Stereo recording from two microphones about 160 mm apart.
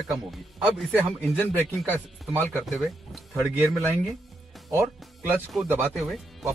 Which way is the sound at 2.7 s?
5° right (ahead or behind).